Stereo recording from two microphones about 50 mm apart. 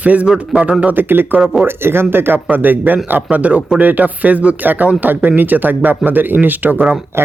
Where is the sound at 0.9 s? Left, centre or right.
Right.